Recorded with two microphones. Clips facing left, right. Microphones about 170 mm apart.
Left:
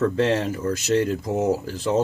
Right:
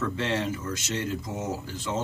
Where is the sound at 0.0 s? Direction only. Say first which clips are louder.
Left 7 dB; 45° left (ahead or behind).